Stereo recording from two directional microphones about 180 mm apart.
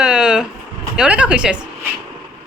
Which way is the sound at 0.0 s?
5° right (ahead or behind).